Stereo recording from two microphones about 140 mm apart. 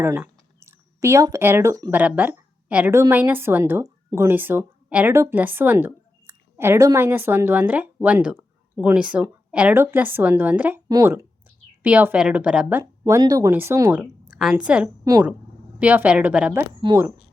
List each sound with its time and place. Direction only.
0.0 s speech: 20° right (ahead or behind)
1.9 s speech: 10° right (ahead or behind)
10.8 s speech: 25° right (ahead or behind)
11.8 s speech: 10° right (ahead or behind)
14.0 s a sound: 5° right (ahead or behind)
14.5 s speech: 10° right (ahead or behind)
15.1 s speech: 25° right (ahead or behind)
15.8 s speech: 10° right (ahead or behind)